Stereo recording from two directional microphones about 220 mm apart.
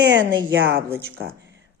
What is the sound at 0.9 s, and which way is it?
Speech, 10° right (ahead or behind).